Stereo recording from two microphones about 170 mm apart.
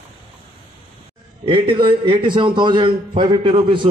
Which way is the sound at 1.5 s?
30° right (ahead or behind).